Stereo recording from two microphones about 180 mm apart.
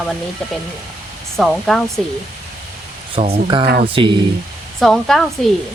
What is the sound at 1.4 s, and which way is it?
Speech, centre (ahead or behind).